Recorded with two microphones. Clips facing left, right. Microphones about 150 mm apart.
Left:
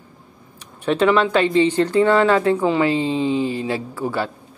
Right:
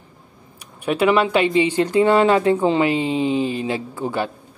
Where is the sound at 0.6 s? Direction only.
10° right (ahead or behind).